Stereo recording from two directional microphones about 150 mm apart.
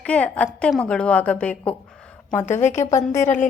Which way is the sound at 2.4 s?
50° left (ahead or behind).